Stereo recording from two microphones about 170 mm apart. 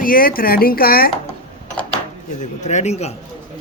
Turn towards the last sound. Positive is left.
turn(degrees=40)  # may be behind; listen again after turning